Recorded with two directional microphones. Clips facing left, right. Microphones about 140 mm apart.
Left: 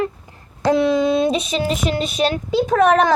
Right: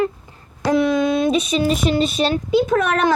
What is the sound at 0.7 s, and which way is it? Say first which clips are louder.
Speech: even; 25° left (ahead or behind).